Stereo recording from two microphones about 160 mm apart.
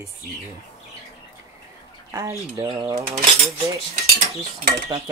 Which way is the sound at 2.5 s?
20° right (ahead or behind).